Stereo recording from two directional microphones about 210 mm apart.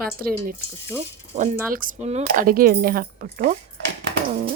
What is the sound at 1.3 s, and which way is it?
Speech, 20° right (ahead or behind).